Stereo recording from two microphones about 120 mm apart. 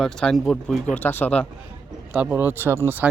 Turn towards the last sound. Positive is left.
turn(degrees=-20)  # may be behind; listen again after turning